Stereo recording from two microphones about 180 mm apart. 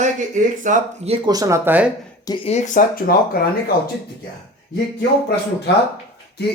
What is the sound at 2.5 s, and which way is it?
Speech, 40° left (ahead or behind).